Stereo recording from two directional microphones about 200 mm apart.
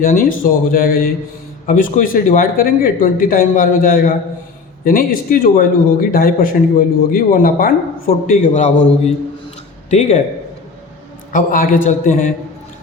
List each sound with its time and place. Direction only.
0.0 s speech: 45° left (ahead or behind)
9.9 s speech: 35° left (ahead or behind)
11.3 s speech: 45° left (ahead or behind)